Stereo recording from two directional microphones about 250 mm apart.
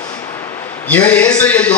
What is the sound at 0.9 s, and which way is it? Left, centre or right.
Speech, centre.